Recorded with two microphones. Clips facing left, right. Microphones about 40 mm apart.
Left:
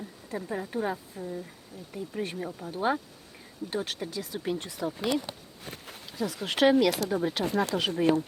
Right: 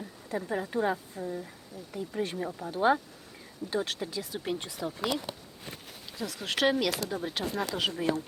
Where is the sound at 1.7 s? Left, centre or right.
Left.